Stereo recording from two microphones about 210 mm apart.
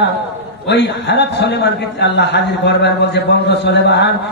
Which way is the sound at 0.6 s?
55° left (ahead or behind).